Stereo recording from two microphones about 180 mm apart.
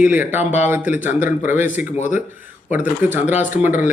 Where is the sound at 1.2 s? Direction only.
45° left (ahead or behind).